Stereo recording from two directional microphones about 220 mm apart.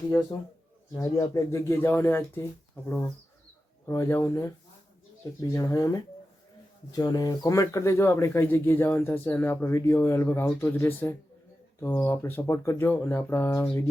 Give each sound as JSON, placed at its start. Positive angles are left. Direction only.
{"t": 0.3, "sound": "speech", "side_deg": 25}
{"t": 6.9, "sound": "speech", "side_deg": 15}